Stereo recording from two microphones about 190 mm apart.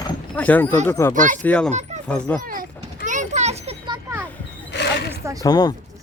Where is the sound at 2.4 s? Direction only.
45° right (ahead or behind).